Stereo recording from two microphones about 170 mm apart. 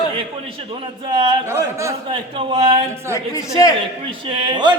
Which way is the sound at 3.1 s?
20° left (ahead or behind).